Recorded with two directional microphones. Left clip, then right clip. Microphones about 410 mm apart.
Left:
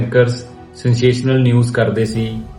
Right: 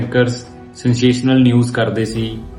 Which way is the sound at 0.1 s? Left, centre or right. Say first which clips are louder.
Left 3 dB; centre.